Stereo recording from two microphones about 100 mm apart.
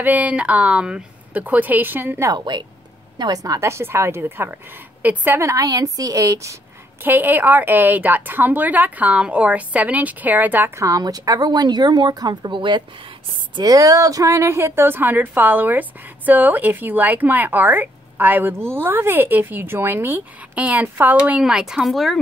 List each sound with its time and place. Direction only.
0.0 s a woman's voice: 15° right (ahead or behind)
2.2 s a woman's voice: 45° right (ahead or behind)
7.0 s a woman's voice: 20° right (ahead or behind)
10.8 s speech: 35° right (ahead or behind); by 12.8 s 55° right (ahead or behind)
13.6 s a woman's voice: 35° right (ahead or behind); by 21.4 s 15° right (ahead or behind)
21.4 s speech: 5° right (ahead or behind)